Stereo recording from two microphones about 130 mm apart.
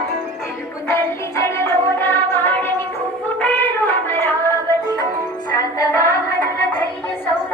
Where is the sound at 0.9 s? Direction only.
20° left (ahead or behind).